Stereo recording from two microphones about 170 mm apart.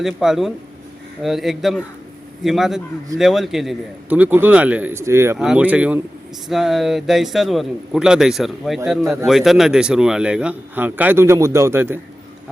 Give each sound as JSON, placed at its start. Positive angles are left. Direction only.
{"t": 0.0, "sound": "a man's voice", "side_deg": 0}